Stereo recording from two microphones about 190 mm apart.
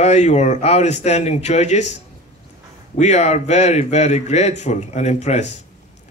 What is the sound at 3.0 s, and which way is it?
Speech, 35° left (ahead or behind).